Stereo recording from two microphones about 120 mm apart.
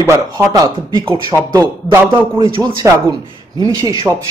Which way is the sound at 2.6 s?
30° right (ahead or behind).